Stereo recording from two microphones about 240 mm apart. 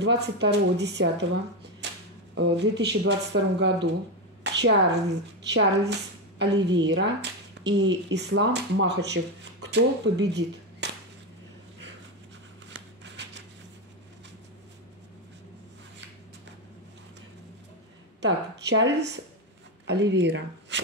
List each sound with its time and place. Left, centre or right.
0.0 s speech: right
2.3 s a woman's voice: right
12.7 s shuffling cards: right
18.2 s speech: right